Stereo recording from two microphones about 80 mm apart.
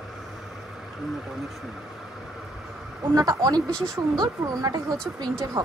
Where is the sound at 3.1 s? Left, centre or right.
Right.